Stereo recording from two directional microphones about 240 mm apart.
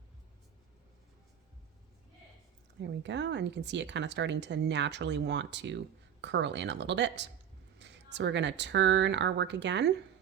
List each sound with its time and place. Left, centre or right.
2.8 s speech: right